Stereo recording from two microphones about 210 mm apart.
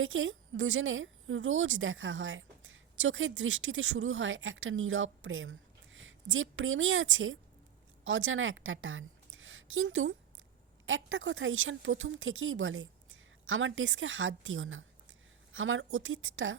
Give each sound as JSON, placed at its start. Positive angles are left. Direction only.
{"t": 0.0, "sound": "a woman's voice", "side_deg": -70}